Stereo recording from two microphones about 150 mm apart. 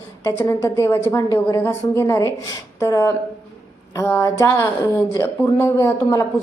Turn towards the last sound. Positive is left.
turn(degrees=20)  # may be behind; listen again after turning